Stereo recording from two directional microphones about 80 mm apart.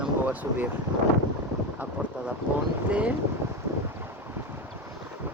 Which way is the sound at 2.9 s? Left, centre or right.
Centre.